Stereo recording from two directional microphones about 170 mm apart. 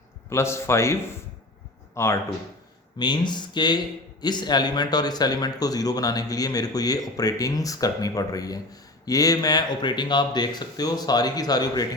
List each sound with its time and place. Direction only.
0.3 s a man's voice: 15° left (ahead or behind)
2.0 s a man's voice: 15° left (ahead or behind)